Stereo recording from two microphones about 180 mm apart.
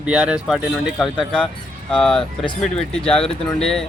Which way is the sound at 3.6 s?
5° left (ahead or behind).